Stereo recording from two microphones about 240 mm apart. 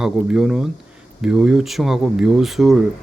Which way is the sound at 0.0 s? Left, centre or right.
Centre.